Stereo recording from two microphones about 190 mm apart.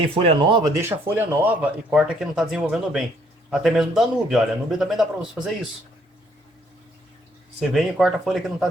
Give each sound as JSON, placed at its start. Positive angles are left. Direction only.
{"t": 0.2, "sound": "speech", "side_deg": -30}
{"t": 0.8, "sound": "speech", "side_deg": -10}
{"t": 7.7, "sound": "speech", "side_deg": 0}